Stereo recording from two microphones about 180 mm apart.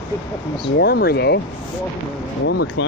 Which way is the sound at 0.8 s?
60° left (ahead or behind).